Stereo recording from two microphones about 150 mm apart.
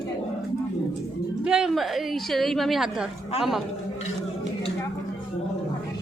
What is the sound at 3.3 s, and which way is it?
Speech, 45° left (ahead or behind).